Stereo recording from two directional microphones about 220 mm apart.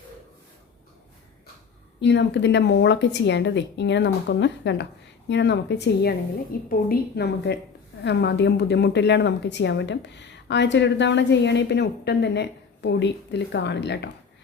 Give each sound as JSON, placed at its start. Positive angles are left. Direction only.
{"t": 2.0, "sound": "a woman's voice", "side_deg": 55}